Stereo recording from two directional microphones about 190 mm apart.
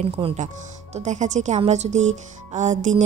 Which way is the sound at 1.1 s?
40° right (ahead or behind).